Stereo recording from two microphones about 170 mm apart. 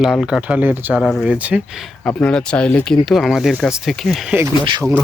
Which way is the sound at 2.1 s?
5° left (ahead or behind).